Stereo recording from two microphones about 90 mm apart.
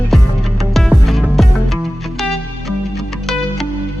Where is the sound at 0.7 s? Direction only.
Centre (ahead or behind).